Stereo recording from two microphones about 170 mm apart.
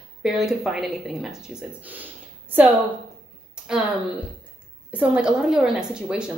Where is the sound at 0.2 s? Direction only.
Centre (ahead or behind).